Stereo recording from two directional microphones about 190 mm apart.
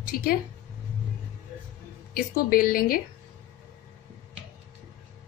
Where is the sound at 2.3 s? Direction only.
50° left (ahead or behind).